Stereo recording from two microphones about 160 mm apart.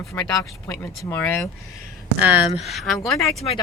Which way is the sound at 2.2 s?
10° right (ahead or behind).